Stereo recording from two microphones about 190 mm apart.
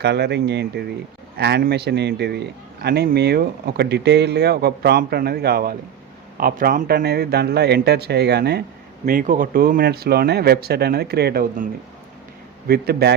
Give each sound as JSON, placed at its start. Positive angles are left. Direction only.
{"t": 0.0, "sound": "a man's voice", "side_deg": -65}
{"t": 9.0, "sound": "a man's voice", "side_deg": -45}